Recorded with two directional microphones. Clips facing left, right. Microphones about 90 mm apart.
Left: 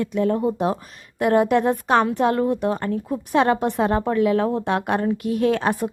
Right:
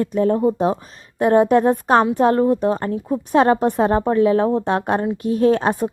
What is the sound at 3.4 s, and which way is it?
Speech, 40° right (ahead or behind).